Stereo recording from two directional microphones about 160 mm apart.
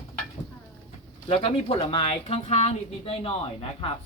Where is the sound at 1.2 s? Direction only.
35° left (ahead or behind).